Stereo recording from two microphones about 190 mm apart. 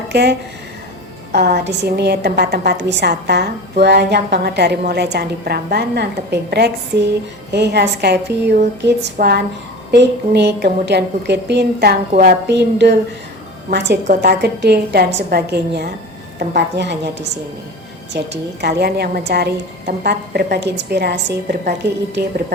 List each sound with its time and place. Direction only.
0.1 s a woman's voice: 60° right (ahead or behind)